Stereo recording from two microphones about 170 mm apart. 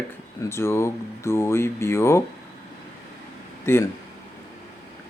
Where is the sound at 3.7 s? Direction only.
15° left (ahead or behind).